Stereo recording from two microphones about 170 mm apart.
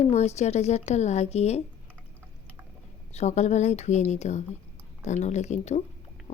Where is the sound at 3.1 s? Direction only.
45° left (ahead or behind).